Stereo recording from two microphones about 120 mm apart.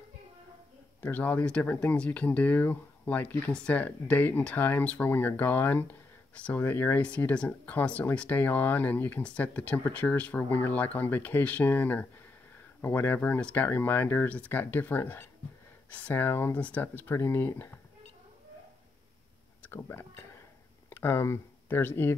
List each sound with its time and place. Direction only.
1.0 s speech: 15° left (ahead or behind)
19.6 s speech: 20° left (ahead or behind)